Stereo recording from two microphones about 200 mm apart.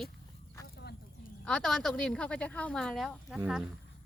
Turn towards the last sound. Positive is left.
turn(degrees=0)  # may be behind; listen again after turning